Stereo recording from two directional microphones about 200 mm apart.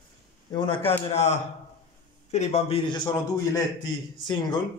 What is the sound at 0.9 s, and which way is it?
A man's voice, 30° left (ahead or behind).